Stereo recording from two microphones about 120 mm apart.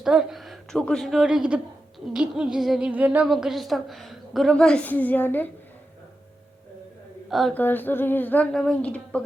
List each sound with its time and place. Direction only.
0.0 s a woman's voice: 5° right (ahead or behind)
2.1 s a sound: 5° right (ahead or behind)
3.2 s a woman's voice: centre (ahead or behind); by 5.5 s 15° left (ahead or behind)
7.3 s a woman's voice: centre (ahead or behind)
7.5 s speech: 15° left (ahead or behind)
8.5 s speech: 5° left (ahead or behind)